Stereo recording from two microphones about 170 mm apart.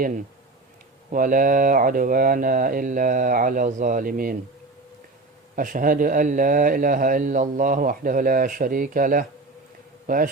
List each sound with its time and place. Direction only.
1.1 s speech: 50° right (ahead or behind)
5.5 s a man's voice: 50° right (ahead or behind)